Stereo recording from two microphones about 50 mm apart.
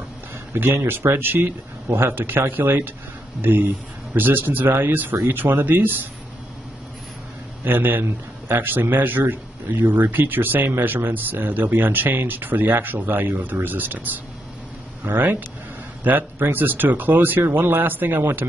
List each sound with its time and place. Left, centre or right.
0.8 s a man's voice: right
7.6 s a man's voice: right